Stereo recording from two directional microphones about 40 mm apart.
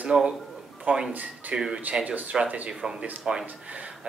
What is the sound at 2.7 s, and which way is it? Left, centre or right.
Speech, centre.